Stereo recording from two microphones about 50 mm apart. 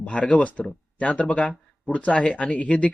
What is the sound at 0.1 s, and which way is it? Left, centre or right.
Speech, left.